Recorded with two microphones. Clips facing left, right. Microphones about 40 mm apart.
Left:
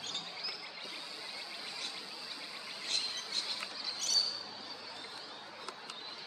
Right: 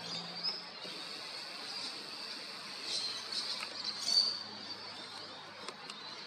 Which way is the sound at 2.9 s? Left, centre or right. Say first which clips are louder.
Left 3 dB; left.